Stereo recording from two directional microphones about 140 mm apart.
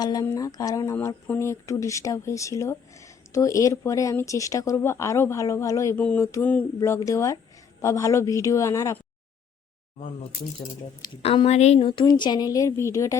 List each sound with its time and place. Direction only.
0.0 s speech: 25° left (ahead or behind)
6.0 s a sound: 15° left (ahead or behind)
6.7 s speech: 20° left (ahead or behind)
11.0 s speech: 30° left (ahead or behind)
11.4 s speech: 50° left (ahead or behind); by 13.1 s 20° left (ahead or behind)